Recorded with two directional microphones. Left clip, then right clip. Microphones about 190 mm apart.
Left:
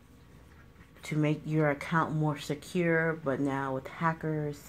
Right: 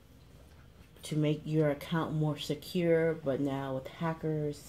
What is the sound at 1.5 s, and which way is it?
Speech, 25° left (ahead or behind).